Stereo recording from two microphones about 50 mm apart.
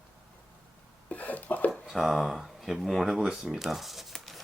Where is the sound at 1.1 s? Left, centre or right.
Left.